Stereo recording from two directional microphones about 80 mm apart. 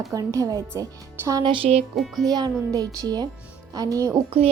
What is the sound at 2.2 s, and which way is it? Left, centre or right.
A child's voice, right.